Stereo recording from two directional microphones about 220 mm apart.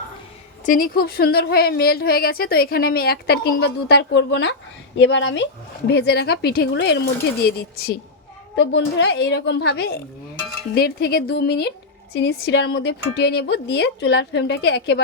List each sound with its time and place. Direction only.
0.6 s a woman's voice: 40° left (ahead or behind)